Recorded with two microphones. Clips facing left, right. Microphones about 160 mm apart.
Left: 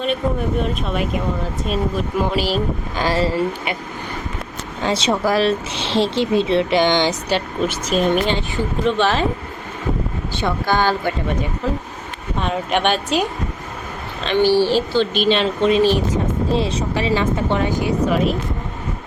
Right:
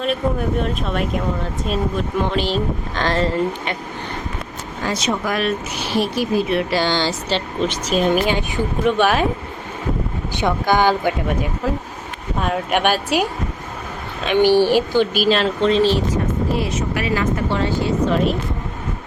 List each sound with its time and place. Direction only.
0.0 s speech: centre (ahead or behind)
4.8 s speech: 25° left (ahead or behind); by 7.8 s 10° left (ahead or behind)
7.9 s speech: centre (ahead or behind)
8.4 s speech: 15° right (ahead or behind)
10.2 s speech: 15° right (ahead or behind)
14.3 s speech: 15° right (ahead or behind)
15.6 s speech: 15° left (ahead or behind)